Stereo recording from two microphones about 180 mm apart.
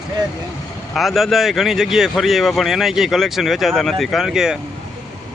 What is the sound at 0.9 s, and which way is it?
Speech, centre (ahead or behind).